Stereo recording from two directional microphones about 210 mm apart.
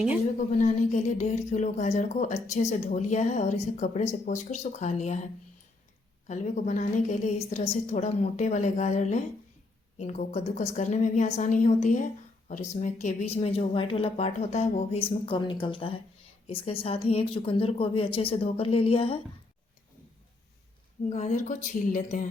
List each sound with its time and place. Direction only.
0.3 s speech: 35° left (ahead or behind)
21.1 s speech: 35° left (ahead or behind)